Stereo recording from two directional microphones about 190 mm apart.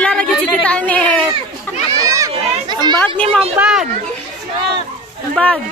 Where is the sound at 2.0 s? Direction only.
15° right (ahead or behind).